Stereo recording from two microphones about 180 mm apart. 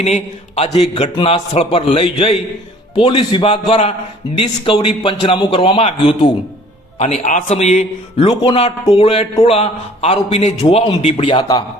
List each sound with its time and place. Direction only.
0.0 s a man's voice: 35° left (ahead or behind)